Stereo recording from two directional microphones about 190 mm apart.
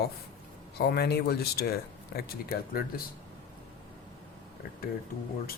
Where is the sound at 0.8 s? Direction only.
60° left (ahead or behind).